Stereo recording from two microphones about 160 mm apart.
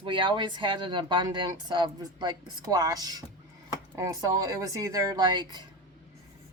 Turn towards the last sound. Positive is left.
turn(degrees=-25)  # may be behind; listen again after turning